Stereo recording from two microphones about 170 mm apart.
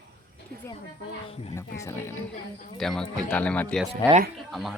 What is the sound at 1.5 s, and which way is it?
Speech, 15° left (ahead or behind).